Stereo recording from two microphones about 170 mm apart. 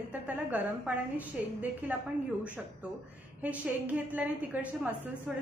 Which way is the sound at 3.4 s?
10° right (ahead or behind).